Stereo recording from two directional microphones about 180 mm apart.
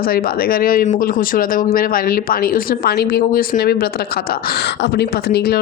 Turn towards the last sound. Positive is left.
turn(degrees=60)  # may be behind; listen again after turning